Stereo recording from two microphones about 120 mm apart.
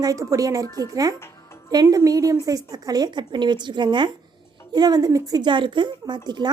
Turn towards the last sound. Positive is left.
turn(degrees=-35)  # may be behind; listen again after turning